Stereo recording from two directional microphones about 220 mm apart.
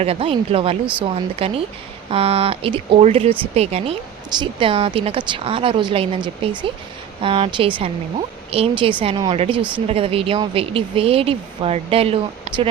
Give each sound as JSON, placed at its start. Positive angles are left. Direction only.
{"t": 0.0, "sound": "speech", "side_deg": -25}